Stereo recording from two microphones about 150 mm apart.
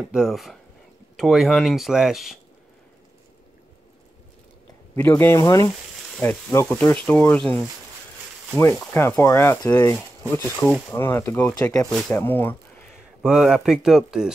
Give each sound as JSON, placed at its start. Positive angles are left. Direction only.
{"t": 0.1, "sound": "speech", "side_deg": 0}
{"t": 4.9, "sound": "speech", "side_deg": 10}
{"t": 8.7, "sound": "speech", "side_deg": 15}
{"t": 12.9, "sound": "speech", "side_deg": -5}